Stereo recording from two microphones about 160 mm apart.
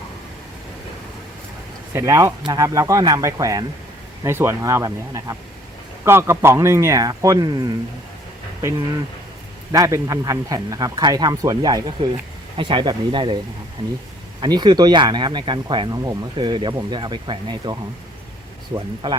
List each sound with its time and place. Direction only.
1.9 s speech: 20° right (ahead or behind)
9.7 s speech: 20° right (ahead or behind)
14.4 s speech: 25° right (ahead or behind)